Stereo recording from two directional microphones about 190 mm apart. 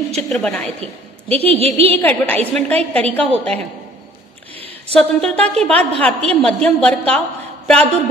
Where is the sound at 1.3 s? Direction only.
30° right (ahead or behind).